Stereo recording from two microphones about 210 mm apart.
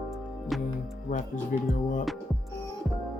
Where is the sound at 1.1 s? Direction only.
40° left (ahead or behind).